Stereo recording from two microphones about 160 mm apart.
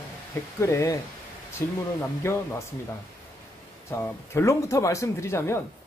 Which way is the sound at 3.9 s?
15° left (ahead or behind).